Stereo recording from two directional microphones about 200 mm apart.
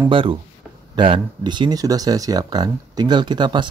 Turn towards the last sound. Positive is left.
turn(degrees=-20)  # may be behind; listen again after turning